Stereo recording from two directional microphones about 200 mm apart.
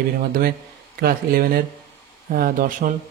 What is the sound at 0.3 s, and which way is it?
Speech, 50° right (ahead or behind).